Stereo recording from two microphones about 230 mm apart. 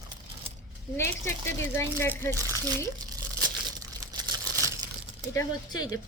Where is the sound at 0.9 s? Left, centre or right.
Centre.